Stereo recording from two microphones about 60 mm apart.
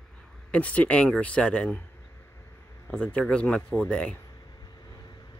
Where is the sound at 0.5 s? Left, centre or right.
Left.